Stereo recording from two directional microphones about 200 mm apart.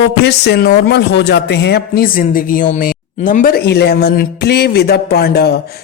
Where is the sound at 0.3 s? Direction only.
55° left (ahead or behind).